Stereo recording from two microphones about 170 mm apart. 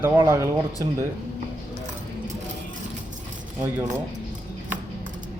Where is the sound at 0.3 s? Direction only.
15° right (ahead or behind).